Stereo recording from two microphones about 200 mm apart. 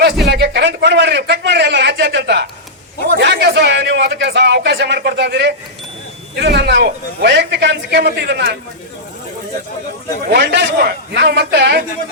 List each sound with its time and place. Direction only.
0.3 s a man's voice: 55° right (ahead or behind)
10.2 s a man's voice: 55° right (ahead or behind)